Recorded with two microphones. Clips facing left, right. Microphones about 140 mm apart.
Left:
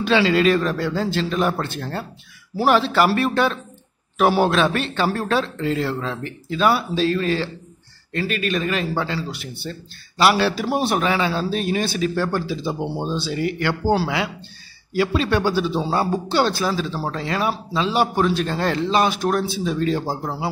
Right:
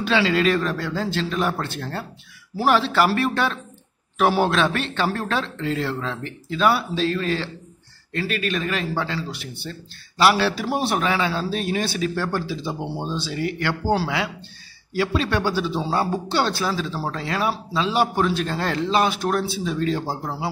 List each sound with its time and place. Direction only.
0.0 s a man's voice: 25° left (ahead or behind)
0.4 s a man's voice: 5° left (ahead or behind)
16.1 s a man's voice: 10° left (ahead or behind)